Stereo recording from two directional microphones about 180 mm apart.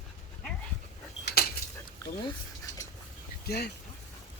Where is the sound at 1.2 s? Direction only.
60° left (ahead or behind).